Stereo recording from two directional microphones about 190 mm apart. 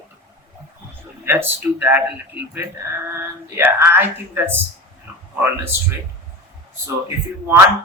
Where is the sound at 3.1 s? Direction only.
10° right (ahead or behind).